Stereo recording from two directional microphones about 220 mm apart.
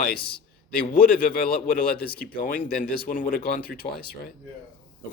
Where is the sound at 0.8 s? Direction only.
40° left (ahead or behind).